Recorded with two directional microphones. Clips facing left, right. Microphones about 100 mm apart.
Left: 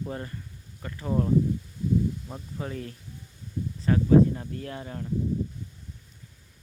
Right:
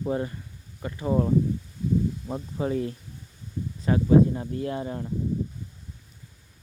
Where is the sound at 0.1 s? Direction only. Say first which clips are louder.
Right 7 dB; 15° right (ahead or behind).